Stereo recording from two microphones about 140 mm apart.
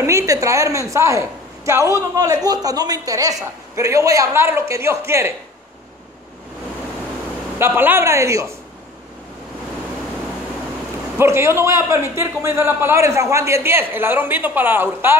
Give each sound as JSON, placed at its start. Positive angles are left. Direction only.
{"t": 0.0, "sound": "a woman's voice", "side_deg": -20}
{"t": 7.5, "sound": "a woman's voice", "side_deg": -15}
{"t": 11.1, "sound": "a woman's voice", "side_deg": -20}